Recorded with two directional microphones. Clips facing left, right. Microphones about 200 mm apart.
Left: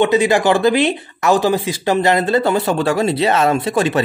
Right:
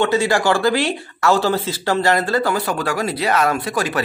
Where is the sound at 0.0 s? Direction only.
20° left (ahead or behind).